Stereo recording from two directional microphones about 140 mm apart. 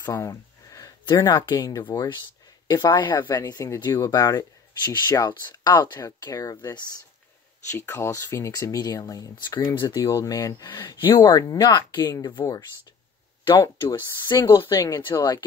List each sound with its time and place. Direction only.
0.0 s a sound: 20° left (ahead or behind)
1.3 s speech: 25° left (ahead or behind)
7.7 s speech: 20° left (ahead or behind)
13.8 s speech: 30° left (ahead or behind)